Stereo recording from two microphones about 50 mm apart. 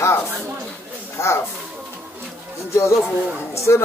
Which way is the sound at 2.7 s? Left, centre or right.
Left.